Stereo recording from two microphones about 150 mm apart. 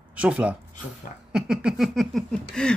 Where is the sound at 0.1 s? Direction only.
10° right (ahead or behind).